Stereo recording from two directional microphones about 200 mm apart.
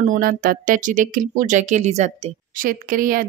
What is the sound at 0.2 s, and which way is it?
A woman's voice, 45° right (ahead or behind).